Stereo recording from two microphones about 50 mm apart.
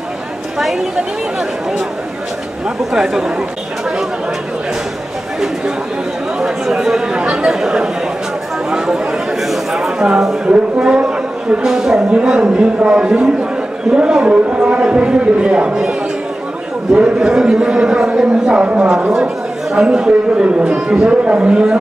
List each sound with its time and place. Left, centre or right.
2.8 s speech: centre
6.4 s chatter: centre
7.2 s chatter: right
7.5 s speech: centre
9.4 s a sound: centre
10.4 s speech: centre
12.2 s speech: right
13.2 s a man's voice: centre
18.6 s speech: right